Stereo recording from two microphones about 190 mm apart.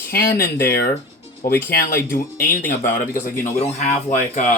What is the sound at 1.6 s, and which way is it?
Speech, 45° left (ahead or behind).